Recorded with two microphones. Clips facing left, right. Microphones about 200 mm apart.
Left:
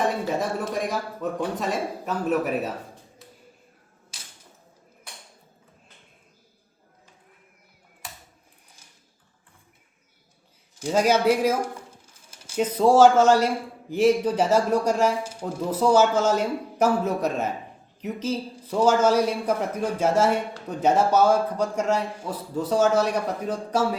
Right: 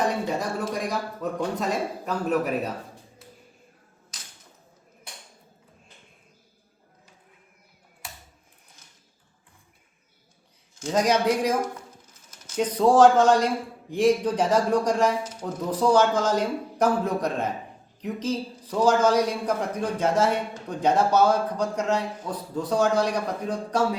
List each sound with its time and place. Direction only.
0.0 s speech: centre (ahead or behind)
10.8 s a man's voice: 5° left (ahead or behind)
11.6 s a sound: 30° left (ahead or behind)
12.5 s a man's voice: 5° left (ahead or behind)